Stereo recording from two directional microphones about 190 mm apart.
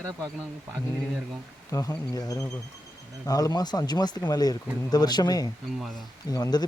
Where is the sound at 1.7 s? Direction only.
15° left (ahead or behind).